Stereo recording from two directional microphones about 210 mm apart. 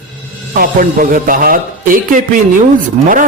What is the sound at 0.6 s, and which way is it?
Speech, 40° right (ahead or behind).